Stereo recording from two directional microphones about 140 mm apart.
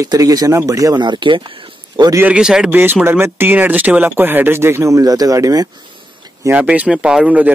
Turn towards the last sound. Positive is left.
turn(degrees=-10)  # may be behind; listen again after turning